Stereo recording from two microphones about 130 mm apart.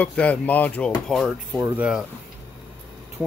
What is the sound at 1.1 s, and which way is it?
Speech, centre (ahead or behind).